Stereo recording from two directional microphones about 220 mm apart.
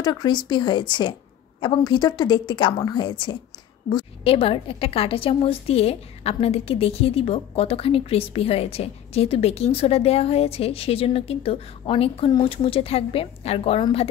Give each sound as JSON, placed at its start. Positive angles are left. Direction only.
{"t": 0.0, "sound": "a woman's voice", "side_deg": 20}